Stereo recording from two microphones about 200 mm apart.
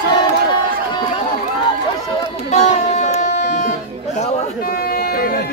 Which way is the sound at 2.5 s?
35° left (ahead or behind).